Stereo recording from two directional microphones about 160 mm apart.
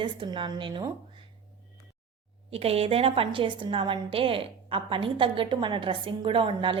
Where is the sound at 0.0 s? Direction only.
30° right (ahead or behind).